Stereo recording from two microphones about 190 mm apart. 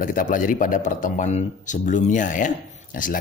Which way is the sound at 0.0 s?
45° left (ahead or behind).